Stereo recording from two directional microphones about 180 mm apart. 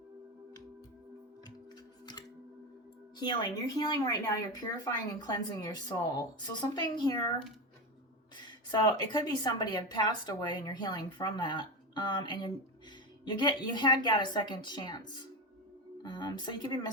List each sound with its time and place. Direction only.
3.2 s a woman's voice: 25° left (ahead or behind)
5.2 s a woman's voice: 20° left (ahead or behind)
8.4 s a woman's voice: 25° left (ahead or behind)